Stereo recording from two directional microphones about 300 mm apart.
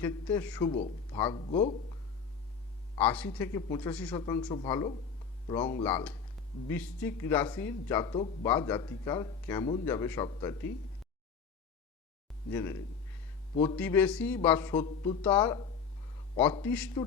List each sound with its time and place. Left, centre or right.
0.0 s speech: centre
3.0 s speech: centre
12.5 s speech: centre
16.6 s speech: centre